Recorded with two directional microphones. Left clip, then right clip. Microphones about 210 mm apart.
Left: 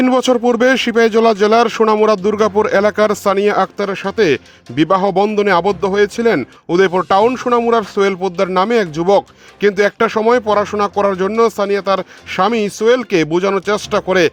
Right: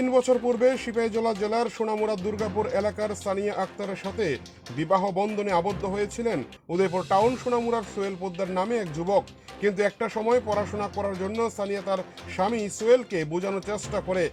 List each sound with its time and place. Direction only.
0.0 s speech: 45° left (ahead or behind)